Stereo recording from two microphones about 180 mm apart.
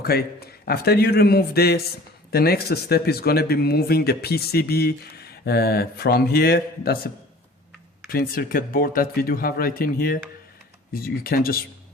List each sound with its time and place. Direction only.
0.0 s speech: 60° left (ahead or behind)
8.1 s speech: 55° left (ahead or behind)